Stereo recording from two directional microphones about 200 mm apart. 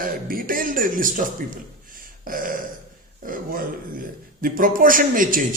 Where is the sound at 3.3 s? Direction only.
45° right (ahead or behind).